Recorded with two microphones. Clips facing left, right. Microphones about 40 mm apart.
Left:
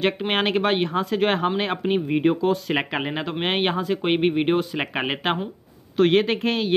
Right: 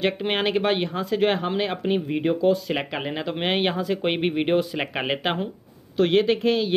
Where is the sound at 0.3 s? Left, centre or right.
Left.